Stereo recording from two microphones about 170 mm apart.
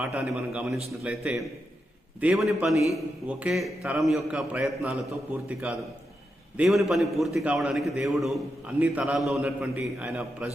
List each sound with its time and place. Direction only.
0.0 s a man's voice: centre (ahead or behind)